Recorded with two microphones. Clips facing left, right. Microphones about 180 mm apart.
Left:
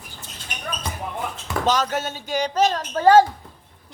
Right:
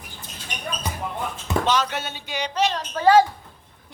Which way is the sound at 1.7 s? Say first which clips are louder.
Left 6 dB; 40° left (ahead or behind).